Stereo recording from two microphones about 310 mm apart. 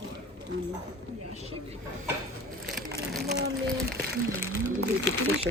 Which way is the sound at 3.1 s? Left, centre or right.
Centre.